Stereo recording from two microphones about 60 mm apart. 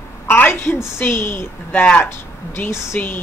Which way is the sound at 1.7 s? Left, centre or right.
Left.